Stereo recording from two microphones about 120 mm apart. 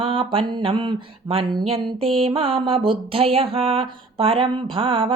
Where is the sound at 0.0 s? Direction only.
45° right (ahead or behind).